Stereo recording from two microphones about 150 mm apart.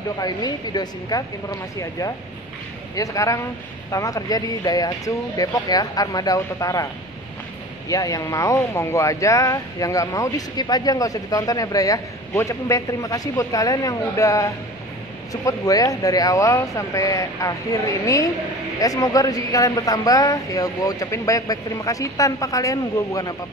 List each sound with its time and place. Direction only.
0.2 s speech: 25° left (ahead or behind)
7.9 s speech: 25° left (ahead or behind)